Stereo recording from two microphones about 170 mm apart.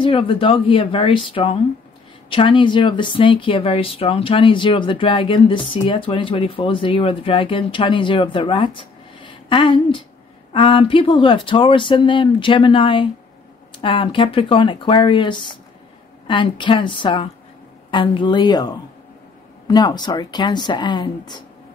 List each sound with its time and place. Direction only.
0.0 s speech: 30° left (ahead or behind)